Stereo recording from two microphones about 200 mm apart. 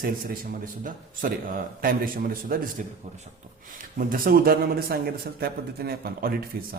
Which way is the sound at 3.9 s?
45° right (ahead or behind).